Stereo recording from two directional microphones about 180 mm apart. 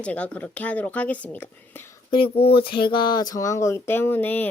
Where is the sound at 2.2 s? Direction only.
30° left (ahead or behind).